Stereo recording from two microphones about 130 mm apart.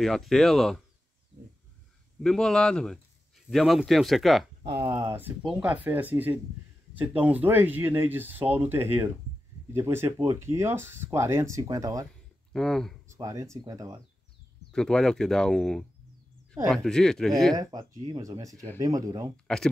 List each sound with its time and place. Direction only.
0.0 s speech: centre (ahead or behind)
2.1 s speech: 5° left (ahead or behind)
4.6 s speech: 30° right (ahead or behind)
4.9 s speech: 15° right (ahead or behind)
12.5 s speech: 5° left (ahead or behind)
13.1 s speech: 25° right (ahead or behind)
14.7 s speech: 5° left (ahead or behind)
17.6 s speech: 25° right (ahead or behind)
19.4 s speech: 5° left (ahead or behind)